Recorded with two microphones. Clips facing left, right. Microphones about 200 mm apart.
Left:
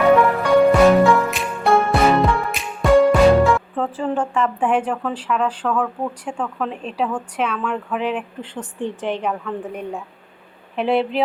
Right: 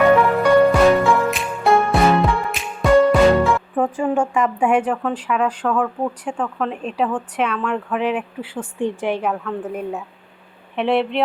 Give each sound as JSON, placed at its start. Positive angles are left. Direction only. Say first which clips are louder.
{"t": 0.7, "sound": "music", "louder": "left 2 dB", "side_deg": 0}
{"t": 3.8, "sound": "a woman's voice", "louder": "right 3 dB", "side_deg": -15}